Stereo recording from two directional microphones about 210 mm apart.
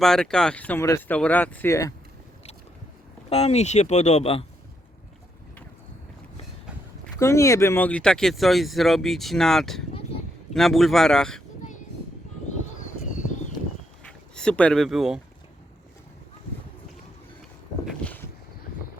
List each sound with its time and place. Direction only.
0.0 s speech: centre (ahead or behind)
3.2 s speech: 30° left (ahead or behind)
7.2 s speech: 15° left (ahead or behind)
12.8 s a sound: 35° left (ahead or behind)
14.0 s speech: 5° left (ahead or behind)
17.8 s a sound: 5° left (ahead or behind)